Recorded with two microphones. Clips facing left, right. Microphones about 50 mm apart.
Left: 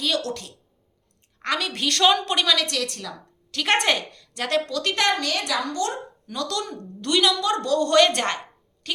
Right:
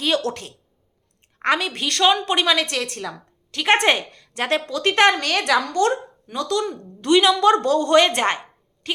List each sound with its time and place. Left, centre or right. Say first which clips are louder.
0.3 s speech: right 4 dB; right
1.5 s a woman's voice: right 2 dB; centre; by 3.2 s right
3.5 s a woman's voice: right 4 dB; centre
3.8 s a woman's voice: right 4 dB; right
6.3 s a woman's voice: right 5 dB; centre; by 7.8 s right
7.8 s a woman's voice: right 2 dB; centre